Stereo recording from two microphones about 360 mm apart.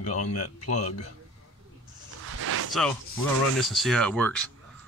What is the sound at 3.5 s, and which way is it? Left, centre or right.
Speech, centre.